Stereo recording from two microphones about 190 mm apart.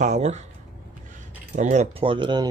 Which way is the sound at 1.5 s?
40° right (ahead or behind).